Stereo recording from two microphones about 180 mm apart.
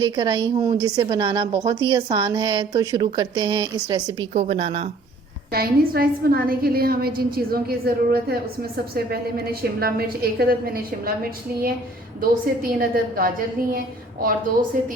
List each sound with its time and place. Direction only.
0.0 s a woman's voice: 25° right (ahead or behind)
4.4 s a woman's voice: 30° right (ahead or behind)
5.5 s a woman's voice: 55° right (ahead or behind)
12.8 s a woman's voice: 55° right (ahead or behind)